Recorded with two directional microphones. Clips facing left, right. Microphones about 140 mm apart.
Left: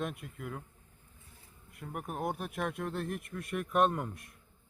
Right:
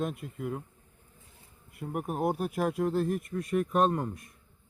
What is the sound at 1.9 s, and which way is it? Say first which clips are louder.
Speech: right 6 dB; 5° right (ahead or behind).